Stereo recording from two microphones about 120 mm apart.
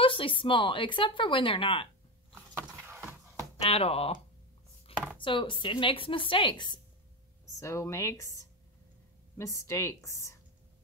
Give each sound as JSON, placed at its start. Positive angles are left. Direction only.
{"t": 0.0, "sound": "a woman's voice", "side_deg": 50}
{"t": 2.5, "sound": "a sound", "side_deg": -15}
{"t": 3.6, "sound": "speech", "side_deg": 55}
{"t": 4.9, "sound": "chopping", "side_deg": 50}
{"t": 5.2, "sound": "a woman's voice", "side_deg": 45}
{"t": 7.6, "sound": "a woman's voice", "side_deg": 25}
{"t": 9.4, "sound": "a woman's voice", "side_deg": 25}